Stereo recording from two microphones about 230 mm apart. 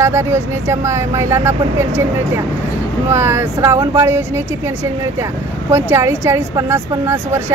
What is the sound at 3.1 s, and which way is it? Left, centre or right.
Speech, centre.